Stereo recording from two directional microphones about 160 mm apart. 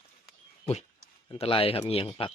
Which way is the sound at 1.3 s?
35° left (ahead or behind).